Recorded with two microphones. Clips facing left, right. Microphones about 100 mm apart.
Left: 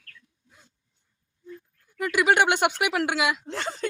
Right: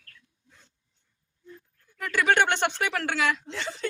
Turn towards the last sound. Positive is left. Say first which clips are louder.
# left 2 dB
turn(degrees=45)  # may be behind; listen again after turning